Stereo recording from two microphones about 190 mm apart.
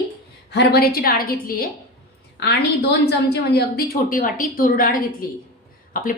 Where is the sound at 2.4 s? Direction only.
60° left (ahead or behind).